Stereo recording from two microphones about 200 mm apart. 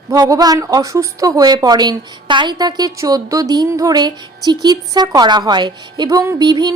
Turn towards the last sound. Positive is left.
turn(degrees=-20)  # may be behind; listen again after turning